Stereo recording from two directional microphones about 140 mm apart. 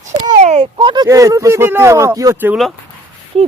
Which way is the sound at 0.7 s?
35° right (ahead or behind).